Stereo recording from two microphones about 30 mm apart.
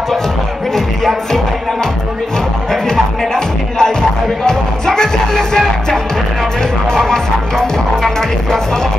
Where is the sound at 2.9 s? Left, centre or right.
Centre.